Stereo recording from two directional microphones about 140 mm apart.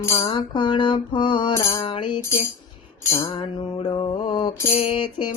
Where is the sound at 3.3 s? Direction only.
40° left (ahead or behind).